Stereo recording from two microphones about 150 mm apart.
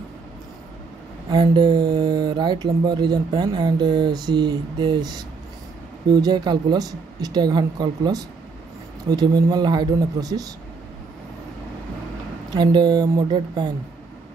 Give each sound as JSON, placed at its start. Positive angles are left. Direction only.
{"t": 1.3, "sound": "speech", "side_deg": -30}
{"t": 12.4, "sound": "speech", "side_deg": -30}